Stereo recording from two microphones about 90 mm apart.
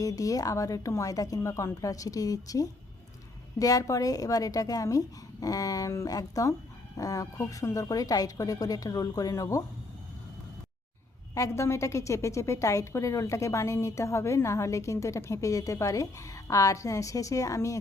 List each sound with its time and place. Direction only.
0.0 s a woman's voice: 40° left (ahead or behind)
11.3 s a woman's voice: 35° left (ahead or behind)